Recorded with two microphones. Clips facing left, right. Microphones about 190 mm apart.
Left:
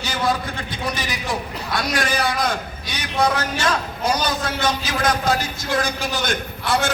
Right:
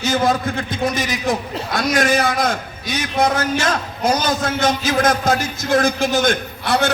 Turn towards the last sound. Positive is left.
turn(degrees=-65)  # may be behind; listen again after turning